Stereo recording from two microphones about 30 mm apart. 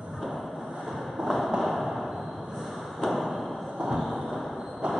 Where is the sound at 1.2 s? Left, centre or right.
Centre.